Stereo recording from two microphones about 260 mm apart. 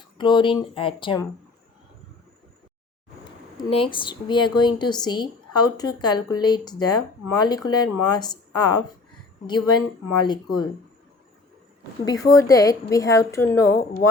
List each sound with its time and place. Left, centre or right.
0.2 s speech: centre
3.6 s speech: centre
10.2 s speech: centre
12.0 s speech: centre
13.4 s speech: left